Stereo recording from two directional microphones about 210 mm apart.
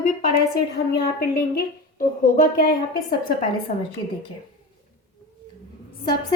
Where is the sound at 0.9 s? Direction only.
45° left (ahead or behind).